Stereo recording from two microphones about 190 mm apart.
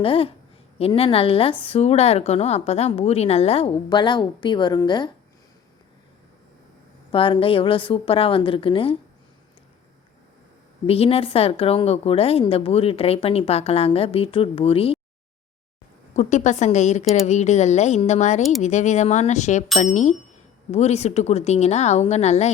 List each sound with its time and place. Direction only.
0.0 s a woman's voice: 30° left (ahead or behind)
7.1 s a woman's voice: 30° left (ahead or behind)
10.8 s a woman's voice: 30° left (ahead or behind)
16.1 s a woman's voice: 40° left (ahead or behind)